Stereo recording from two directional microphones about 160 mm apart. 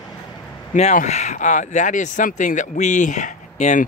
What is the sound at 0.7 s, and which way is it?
Speech, 50° left (ahead or behind).